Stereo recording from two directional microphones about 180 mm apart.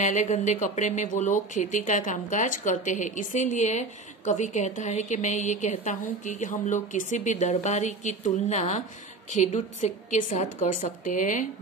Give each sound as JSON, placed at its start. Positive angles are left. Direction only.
{"t": 0.0, "sound": "a woman's voice", "side_deg": 40}